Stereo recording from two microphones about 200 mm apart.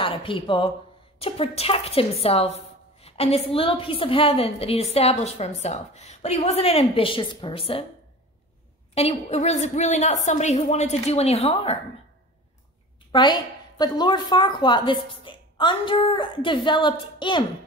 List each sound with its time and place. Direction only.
0.0 s a woman's voice: 25° left (ahead or behind)
8.9 s speech: 35° left (ahead or behind)
13.1 s a woman's voice: 20° left (ahead or behind)